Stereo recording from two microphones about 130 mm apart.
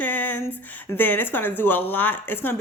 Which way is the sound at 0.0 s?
10° left (ahead or behind).